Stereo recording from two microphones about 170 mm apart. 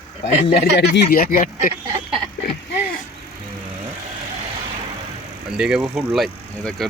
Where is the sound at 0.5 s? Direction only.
75° left (ahead or behind); by 1.7 s 55° left (ahead or behind).